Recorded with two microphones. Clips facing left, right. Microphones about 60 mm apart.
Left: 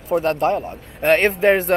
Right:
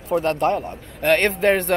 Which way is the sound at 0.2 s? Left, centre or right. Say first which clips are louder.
Left 1 dB; left.